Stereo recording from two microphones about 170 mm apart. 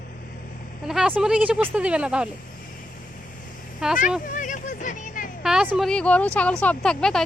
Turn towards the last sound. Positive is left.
turn(degrees=5)  # may be behind; listen again after turning